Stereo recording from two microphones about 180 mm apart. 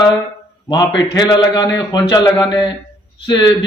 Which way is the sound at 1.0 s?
20° left (ahead or behind).